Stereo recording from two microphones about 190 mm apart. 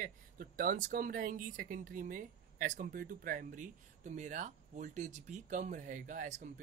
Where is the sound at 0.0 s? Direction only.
45° right (ahead or behind).